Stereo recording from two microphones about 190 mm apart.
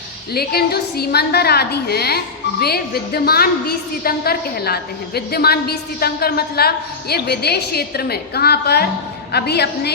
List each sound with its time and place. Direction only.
0.3 s a woman's voice: 55° left (ahead or behind)